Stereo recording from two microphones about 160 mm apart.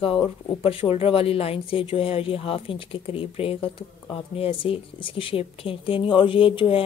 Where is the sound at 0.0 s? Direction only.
35° left (ahead or behind).